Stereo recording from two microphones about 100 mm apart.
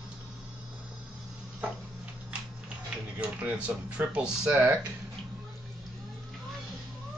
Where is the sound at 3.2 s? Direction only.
15° right (ahead or behind).